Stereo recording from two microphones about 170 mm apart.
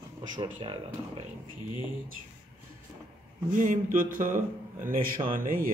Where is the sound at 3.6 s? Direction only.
55° right (ahead or behind).